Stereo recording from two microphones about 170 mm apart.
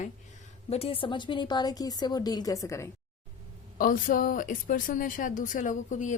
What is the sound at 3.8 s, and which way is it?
A woman's voice, 55° left (ahead or behind).